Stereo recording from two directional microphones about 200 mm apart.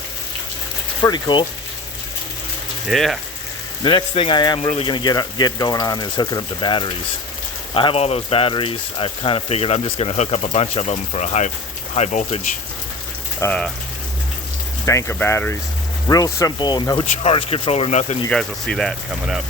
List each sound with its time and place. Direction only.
1.0 s speech: 20° left (ahead or behind)
2.8 s speech: centre (ahead or behind)
3.8 s speech: 25° left (ahead or behind)
13.4 s speech: 5° left (ahead or behind)
14.8 s speech: 15° left (ahead or behind); by 18.2 s 35° left (ahead or behind)
18.3 s speech: 5° left (ahead or behind)